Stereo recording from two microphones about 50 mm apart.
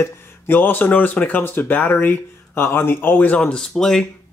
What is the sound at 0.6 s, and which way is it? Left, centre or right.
Speech, left.